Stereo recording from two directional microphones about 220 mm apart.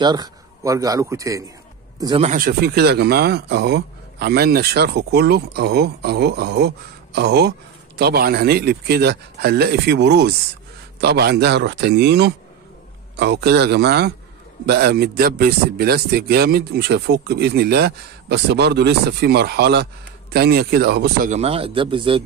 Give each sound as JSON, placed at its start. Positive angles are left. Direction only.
{"t": 0.0, "sound": "a man's voice", "side_deg": -20}
{"t": 2.2, "sound": "speech", "side_deg": -40}
{"t": 21.3, "sound": "speech", "side_deg": -30}